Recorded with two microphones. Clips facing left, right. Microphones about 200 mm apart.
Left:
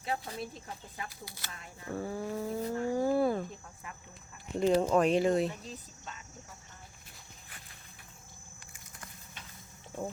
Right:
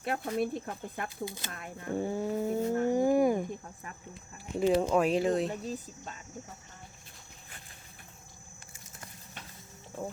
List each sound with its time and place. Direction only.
0.0 s speech: 60° right (ahead or behind)
1.2 s vehicle: 20° right (ahead or behind)
1.5 s speech: 55° right (ahead or behind)
1.9 s vehicle: 20° right (ahead or behind)
2.8 s a sound: 20° right (ahead or behind)
4.5 s speech: centre (ahead or behind)
5.5 s speech: 45° right (ahead or behind)